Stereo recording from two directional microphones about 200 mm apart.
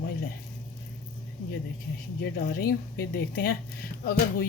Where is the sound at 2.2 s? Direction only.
55° left (ahead or behind).